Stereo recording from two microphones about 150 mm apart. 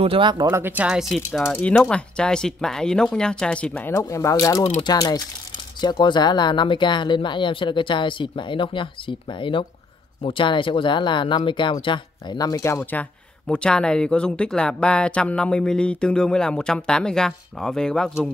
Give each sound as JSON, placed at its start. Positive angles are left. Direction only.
{"t": 0.0, "sound": "speech", "side_deg": -35}
{"t": 0.5, "sound": "speech", "side_deg": -15}
{"t": 3.9, "sound": "speech", "side_deg": 20}
{"t": 13.5, "sound": "speech", "side_deg": 5}